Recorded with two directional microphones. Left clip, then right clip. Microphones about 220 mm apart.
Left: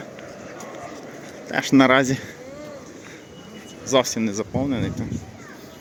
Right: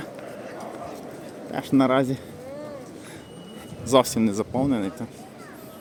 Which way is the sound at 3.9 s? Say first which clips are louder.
Even; 15° right (ahead or behind).